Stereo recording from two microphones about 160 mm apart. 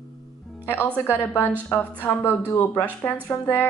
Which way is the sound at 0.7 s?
10° left (ahead or behind).